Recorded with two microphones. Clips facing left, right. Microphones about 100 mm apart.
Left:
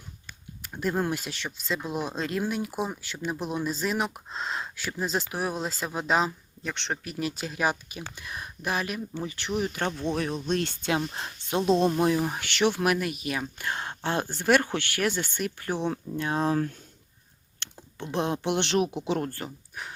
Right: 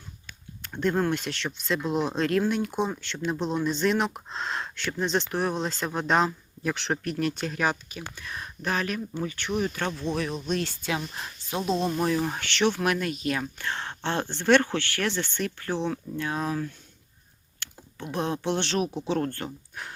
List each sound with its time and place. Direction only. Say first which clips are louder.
0.6 s speech: right 3 dB; 5° left (ahead or behind); by 16.6 s 30° left (ahead or behind)
18.1 s speech: left 1 dB; 20° left (ahead or behind)
19.5 s speech: right 1 dB; centre (ahead or behind)